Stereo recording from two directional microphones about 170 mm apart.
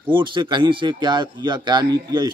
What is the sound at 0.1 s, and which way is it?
A man's voice, 30° right (ahead or behind).